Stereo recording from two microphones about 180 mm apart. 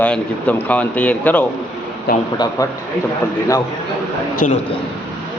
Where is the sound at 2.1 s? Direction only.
55° left (ahead or behind).